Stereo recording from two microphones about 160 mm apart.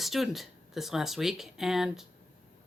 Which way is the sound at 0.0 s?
Centre (ahead or behind).